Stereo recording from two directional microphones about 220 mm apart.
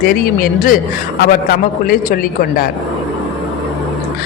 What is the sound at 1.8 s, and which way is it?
Speech, 40° left (ahead or behind).